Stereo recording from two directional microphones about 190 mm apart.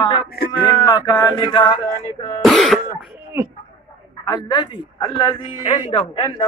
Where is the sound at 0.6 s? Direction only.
20° left (ahead or behind).